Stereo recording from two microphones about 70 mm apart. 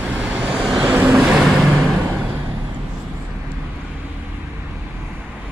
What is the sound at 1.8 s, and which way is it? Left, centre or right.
Vehicle, right.